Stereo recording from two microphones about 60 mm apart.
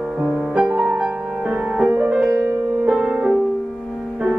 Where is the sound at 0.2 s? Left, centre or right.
Centre.